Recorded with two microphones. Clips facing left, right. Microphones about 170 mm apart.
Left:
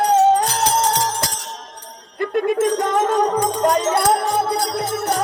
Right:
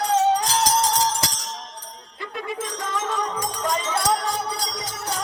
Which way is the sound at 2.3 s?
55° left (ahead or behind).